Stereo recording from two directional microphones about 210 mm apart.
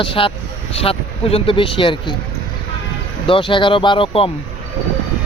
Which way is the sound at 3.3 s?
25° left (ahead or behind).